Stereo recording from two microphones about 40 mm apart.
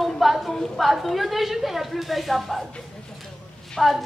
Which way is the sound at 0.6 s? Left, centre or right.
Centre.